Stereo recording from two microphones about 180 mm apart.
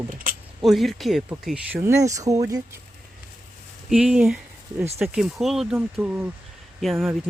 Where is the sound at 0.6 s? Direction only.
Centre (ahead or behind); by 2.6 s 20° right (ahead or behind).